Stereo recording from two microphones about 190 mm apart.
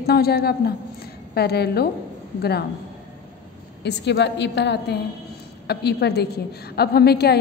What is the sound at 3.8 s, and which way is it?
A woman's voice, 65° left (ahead or behind).